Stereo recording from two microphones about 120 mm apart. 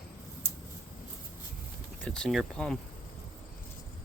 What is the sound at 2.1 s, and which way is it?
Speech, 5° left (ahead or behind).